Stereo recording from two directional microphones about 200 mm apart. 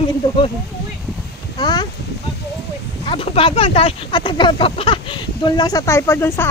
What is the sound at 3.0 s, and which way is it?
Speech, 25° left (ahead or behind).